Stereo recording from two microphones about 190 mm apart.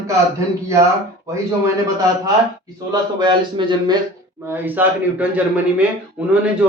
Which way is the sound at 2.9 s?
25° right (ahead or behind).